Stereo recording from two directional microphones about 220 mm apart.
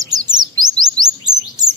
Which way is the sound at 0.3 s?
20° right (ahead or behind).